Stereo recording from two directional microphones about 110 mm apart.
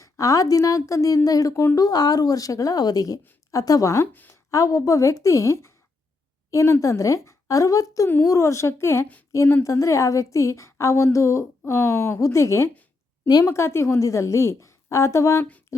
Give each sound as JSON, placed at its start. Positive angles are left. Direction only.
{"t": 0.0, "sound": "a woman's voice", "side_deg": 30}
{"t": 4.1, "sound": "a woman's voice", "side_deg": 15}
{"t": 4.5, "sound": "a woman's voice", "side_deg": 30}